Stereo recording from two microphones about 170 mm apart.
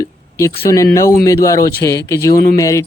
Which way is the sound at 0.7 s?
20° left (ahead or behind).